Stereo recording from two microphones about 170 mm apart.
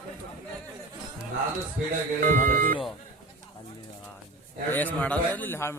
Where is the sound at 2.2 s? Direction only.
50° right (ahead or behind).